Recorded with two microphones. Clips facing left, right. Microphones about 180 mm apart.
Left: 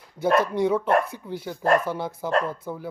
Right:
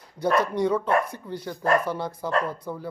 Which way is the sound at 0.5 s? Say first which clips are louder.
Left 2 dB; 10° left (ahead or behind).